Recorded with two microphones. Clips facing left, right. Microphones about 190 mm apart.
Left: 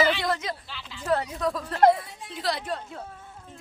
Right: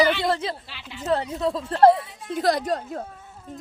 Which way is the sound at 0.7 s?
70° right (ahead or behind).